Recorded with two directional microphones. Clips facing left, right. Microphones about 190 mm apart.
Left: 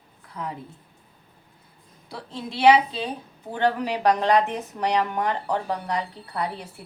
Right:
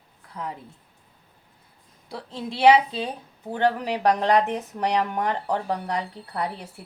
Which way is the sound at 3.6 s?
50° right (ahead or behind).